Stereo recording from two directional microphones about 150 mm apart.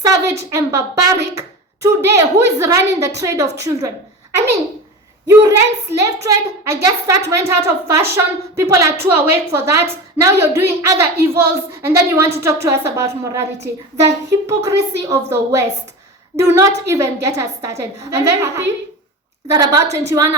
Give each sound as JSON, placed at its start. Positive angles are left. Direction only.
{"t": 0.0, "sound": "a sound", "side_deg": -20}
{"t": 0.5, "sound": "a woman's voice", "side_deg": -20}
{"t": 5.3, "sound": "a woman's voice", "side_deg": -20}